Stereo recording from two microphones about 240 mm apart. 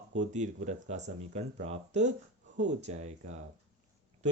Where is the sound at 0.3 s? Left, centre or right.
Right.